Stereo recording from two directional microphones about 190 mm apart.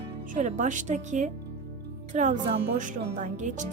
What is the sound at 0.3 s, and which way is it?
A woman's voice, 40° right (ahead or behind).